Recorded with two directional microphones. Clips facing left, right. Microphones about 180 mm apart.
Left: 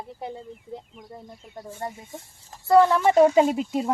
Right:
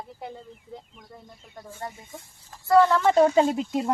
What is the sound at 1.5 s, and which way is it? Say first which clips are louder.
Speech: left 3 dB; 25° left (ahead or behind).